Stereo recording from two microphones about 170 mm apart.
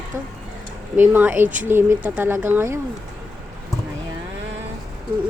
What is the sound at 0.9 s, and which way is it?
Speech, 10° right (ahead or behind).